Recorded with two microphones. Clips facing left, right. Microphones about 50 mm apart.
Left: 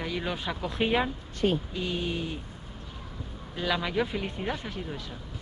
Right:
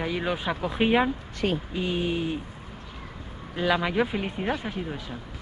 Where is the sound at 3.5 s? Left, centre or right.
Centre.